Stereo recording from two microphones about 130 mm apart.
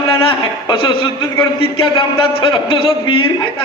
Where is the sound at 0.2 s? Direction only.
45° left (ahead or behind).